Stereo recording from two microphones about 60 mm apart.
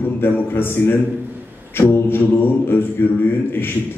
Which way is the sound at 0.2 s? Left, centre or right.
Left.